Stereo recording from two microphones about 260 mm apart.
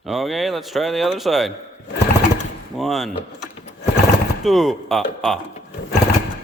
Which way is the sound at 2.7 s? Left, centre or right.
Centre.